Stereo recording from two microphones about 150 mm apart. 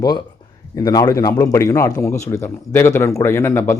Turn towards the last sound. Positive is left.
turn(degrees=20)  # may be behind; listen again after turning